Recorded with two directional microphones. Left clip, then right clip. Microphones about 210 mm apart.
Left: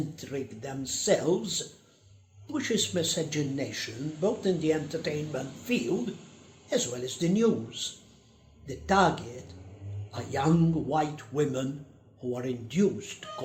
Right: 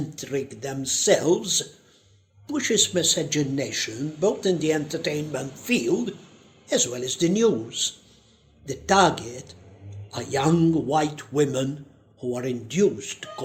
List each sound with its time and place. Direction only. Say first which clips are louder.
0.2 s speech: right 7 dB; 45° right (ahead or behind)